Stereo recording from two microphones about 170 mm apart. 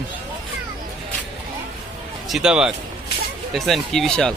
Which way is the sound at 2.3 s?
5° right (ahead or behind).